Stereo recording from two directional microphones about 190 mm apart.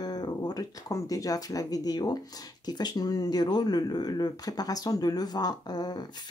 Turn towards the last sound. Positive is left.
turn(degrees=20)  # may be behind; listen again after turning